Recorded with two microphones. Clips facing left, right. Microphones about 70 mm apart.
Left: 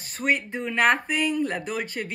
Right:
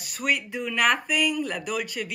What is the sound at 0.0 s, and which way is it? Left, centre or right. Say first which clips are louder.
A woman's voice: left 2 dB; left.